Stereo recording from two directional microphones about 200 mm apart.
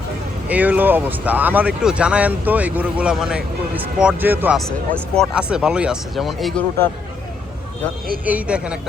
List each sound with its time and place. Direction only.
0.4 s speech: 10° right (ahead or behind)
8.2 s speech: 5° right (ahead or behind)